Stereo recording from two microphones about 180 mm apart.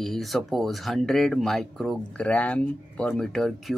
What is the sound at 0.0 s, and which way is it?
Speech, centre (ahead or behind).